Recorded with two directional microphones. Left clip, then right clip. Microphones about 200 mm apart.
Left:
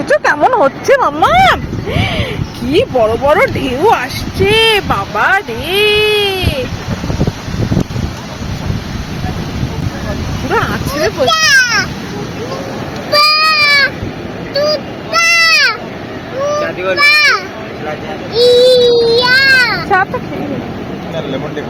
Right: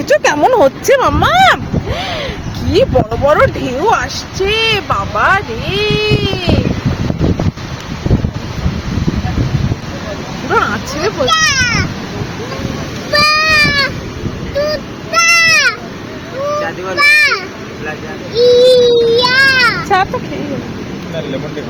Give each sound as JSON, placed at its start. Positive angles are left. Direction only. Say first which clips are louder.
{"t": 0.1, "sound": "speech", "louder": "even", "side_deg": -15}
{"t": 3.2, "sound": "speech", "louder": "even", "side_deg": 0}
{"t": 10.5, "sound": "speech", "louder": "right 1 dB", "side_deg": 5}
{"t": 11.3, "sound": "a child's voice", "louder": "left 3 dB", "side_deg": 25}
{"t": 13.1, "sound": "sheep", "louder": "left 1 dB", "side_deg": -10}
{"t": 14.6, "sound": "a sound", "louder": "left 3 dB", "side_deg": -10}
{"t": 17.0, "sound": "speech", "louder": "even", "side_deg": -10}